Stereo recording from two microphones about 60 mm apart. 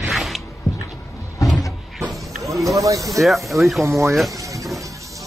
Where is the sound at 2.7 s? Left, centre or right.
Right.